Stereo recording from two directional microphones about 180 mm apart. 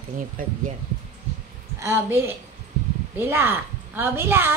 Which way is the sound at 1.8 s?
15° right (ahead or behind).